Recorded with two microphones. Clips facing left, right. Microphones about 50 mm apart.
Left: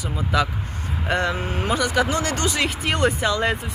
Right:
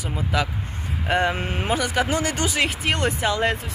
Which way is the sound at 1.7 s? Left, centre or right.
Centre.